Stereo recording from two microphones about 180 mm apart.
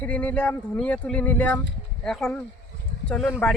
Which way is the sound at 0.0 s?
10° left (ahead or behind).